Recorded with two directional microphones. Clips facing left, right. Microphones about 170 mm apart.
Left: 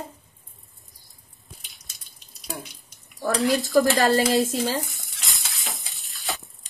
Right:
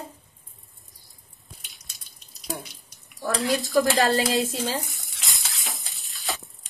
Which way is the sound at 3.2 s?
Centre (ahead or behind).